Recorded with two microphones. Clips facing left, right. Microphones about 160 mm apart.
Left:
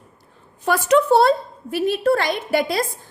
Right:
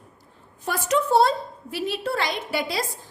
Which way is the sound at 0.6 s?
75° left (ahead or behind).